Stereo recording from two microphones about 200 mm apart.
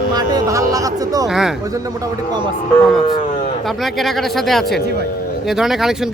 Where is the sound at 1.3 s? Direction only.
Centre (ahead or behind).